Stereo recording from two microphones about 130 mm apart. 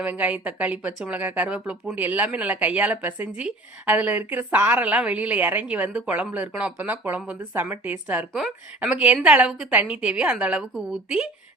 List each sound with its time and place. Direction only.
0.0 s speech: 10° right (ahead or behind)